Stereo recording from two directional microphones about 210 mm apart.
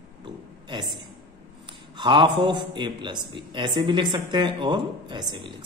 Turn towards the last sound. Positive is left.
turn(degrees=-20)  # may be behind; listen again after turning